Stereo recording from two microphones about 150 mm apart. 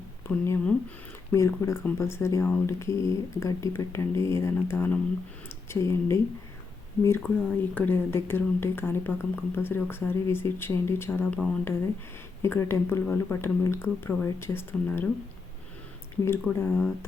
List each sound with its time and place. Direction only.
0.3 s speech: 15° left (ahead or behind)
16.2 s speech: 15° left (ahead or behind)